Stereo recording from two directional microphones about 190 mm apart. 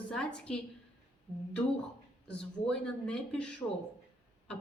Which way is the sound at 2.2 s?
5° left (ahead or behind).